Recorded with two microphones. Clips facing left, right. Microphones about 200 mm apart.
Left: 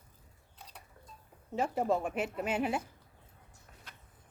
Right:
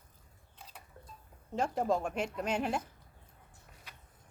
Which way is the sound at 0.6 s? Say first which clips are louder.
Even; centre (ahead or behind).